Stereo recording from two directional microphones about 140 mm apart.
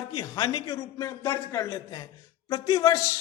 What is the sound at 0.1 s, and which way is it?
A man's voice, 30° left (ahead or behind).